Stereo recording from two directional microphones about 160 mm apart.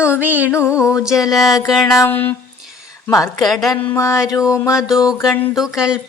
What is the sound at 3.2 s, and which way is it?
Speech, centre (ahead or behind).